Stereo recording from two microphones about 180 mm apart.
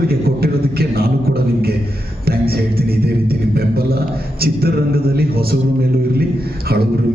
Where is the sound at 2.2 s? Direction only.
60° right (ahead or behind).